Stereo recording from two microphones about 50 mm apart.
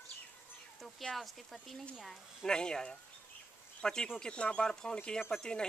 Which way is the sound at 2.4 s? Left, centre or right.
Centre.